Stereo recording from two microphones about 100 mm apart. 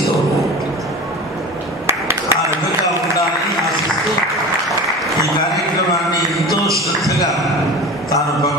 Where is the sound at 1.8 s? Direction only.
25° right (ahead or behind).